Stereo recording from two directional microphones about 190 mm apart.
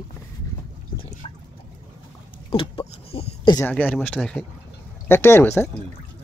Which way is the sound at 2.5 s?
30° left (ahead or behind).